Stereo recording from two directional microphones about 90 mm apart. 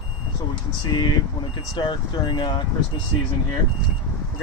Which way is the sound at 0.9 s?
50° left (ahead or behind).